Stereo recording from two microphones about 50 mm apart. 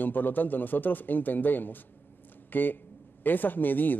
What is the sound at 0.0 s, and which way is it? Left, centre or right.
A man's voice, left.